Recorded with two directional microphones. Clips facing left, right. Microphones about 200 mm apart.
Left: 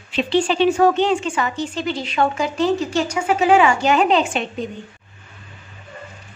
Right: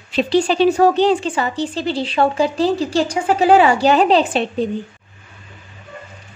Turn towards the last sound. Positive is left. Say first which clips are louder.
# right 4 dB
turn(degrees=-35)  # may be behind; listen again after turning